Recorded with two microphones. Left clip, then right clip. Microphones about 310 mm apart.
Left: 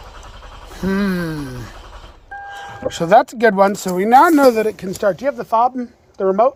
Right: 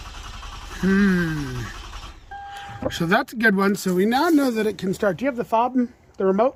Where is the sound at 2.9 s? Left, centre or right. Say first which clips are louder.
Left 9 dB; centre.